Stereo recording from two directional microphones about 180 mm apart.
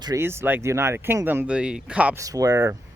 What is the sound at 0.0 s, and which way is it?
Speech, 15° right (ahead or behind).